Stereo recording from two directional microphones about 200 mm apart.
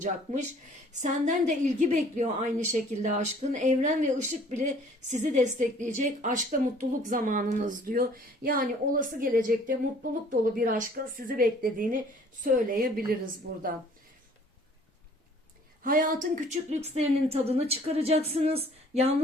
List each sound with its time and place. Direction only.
0.0 s a woman's voice: 35° right (ahead or behind)
15.8 s speech: 40° right (ahead or behind)